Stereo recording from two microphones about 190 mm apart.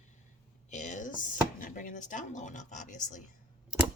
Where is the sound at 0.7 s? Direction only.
40° left (ahead or behind).